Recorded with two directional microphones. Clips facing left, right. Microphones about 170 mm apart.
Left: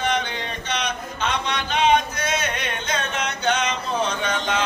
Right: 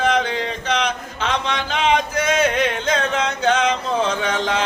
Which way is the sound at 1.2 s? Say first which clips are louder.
Right 2 dB; 90° right.